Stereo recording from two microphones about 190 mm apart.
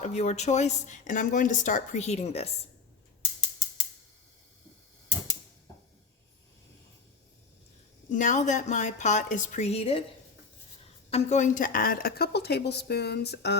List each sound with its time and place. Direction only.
0.0 s speech: 35° left (ahead or behind)
8.1 s speech: 40° left (ahead or behind)
11.1 s a woman's voice: 35° left (ahead or behind); by 13.6 s 60° left (ahead or behind)